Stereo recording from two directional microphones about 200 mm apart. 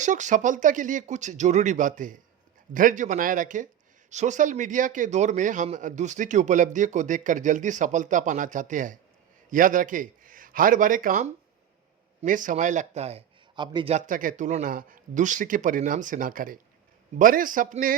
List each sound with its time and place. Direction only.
0.0 s a man's voice: 40° right (ahead or behind)
13.9 s a man's voice: 40° right (ahead or behind)